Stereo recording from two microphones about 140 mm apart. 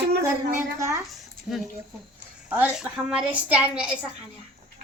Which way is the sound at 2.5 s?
5° right (ahead or behind).